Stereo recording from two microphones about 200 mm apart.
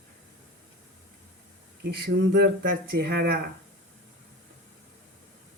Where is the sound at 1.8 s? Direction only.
55° right (ahead or behind).